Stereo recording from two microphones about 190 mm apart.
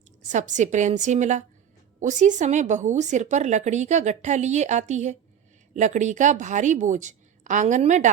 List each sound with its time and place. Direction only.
0.3 s a woman's voice: 40° right (ahead or behind)